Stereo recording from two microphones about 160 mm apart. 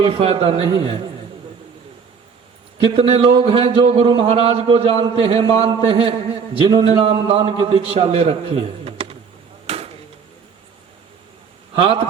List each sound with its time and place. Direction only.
0.0 s a man's voice: 40° right (ahead or behind)
2.8 s a man's voice: 35° right (ahead or behind)
9.6 s a sound: 40° right (ahead or behind)
11.8 s a man's voice: 35° right (ahead or behind)